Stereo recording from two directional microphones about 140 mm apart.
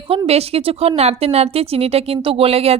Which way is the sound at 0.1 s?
45° right (ahead or behind).